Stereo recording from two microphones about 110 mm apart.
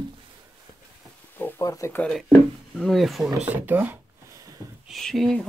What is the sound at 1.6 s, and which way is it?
Speech, 30° left (ahead or behind).